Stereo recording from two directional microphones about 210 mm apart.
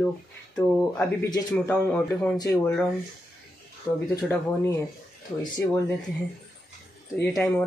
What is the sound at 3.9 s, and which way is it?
Speech, 15° left (ahead or behind).